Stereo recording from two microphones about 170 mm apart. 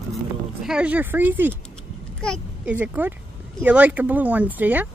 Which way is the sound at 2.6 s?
10° right (ahead or behind).